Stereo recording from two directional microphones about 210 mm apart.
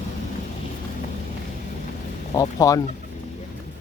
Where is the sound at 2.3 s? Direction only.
15° left (ahead or behind).